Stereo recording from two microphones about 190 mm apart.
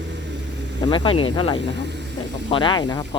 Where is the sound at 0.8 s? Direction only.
25° left (ahead or behind).